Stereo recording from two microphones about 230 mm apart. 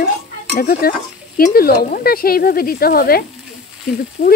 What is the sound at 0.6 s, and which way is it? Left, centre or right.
Speech, left.